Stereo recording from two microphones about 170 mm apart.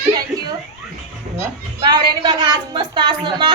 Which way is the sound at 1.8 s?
25° right (ahead or behind).